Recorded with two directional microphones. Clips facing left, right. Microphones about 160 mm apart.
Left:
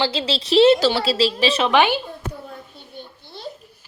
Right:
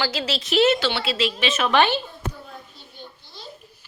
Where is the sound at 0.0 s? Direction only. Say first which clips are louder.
Left 3 dB; 25° left (ahead or behind).